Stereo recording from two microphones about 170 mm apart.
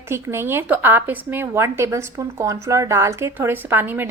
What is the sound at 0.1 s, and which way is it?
A woman's voice, 15° right (ahead or behind).